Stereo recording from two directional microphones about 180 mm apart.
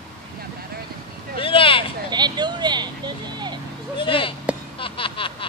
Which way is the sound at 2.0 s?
25° right (ahead or behind).